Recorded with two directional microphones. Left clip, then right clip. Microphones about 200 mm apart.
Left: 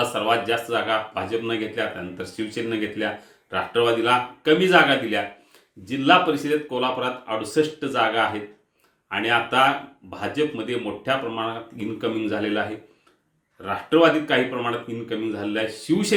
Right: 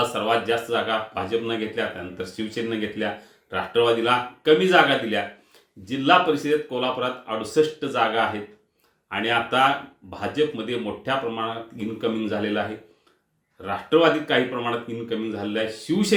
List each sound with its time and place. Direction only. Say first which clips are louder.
0.0 s speech: left 1 dB; 10° left (ahead or behind)